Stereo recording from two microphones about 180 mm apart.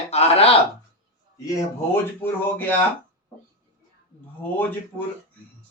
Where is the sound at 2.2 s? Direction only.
10° left (ahead or behind).